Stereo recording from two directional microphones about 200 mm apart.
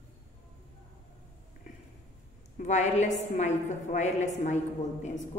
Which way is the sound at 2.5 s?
35° left (ahead or behind).